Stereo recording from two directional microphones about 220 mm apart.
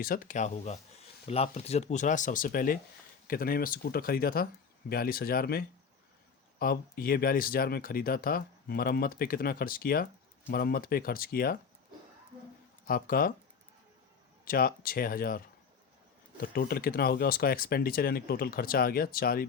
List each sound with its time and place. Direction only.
0.0 s speech: 40° left (ahead or behind)
12.9 s speech: 40° left (ahead or behind)
14.4 s speech: 40° left (ahead or behind)